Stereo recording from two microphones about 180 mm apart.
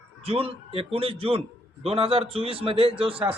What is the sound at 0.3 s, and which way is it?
A man's voice, 30° right (ahead or behind).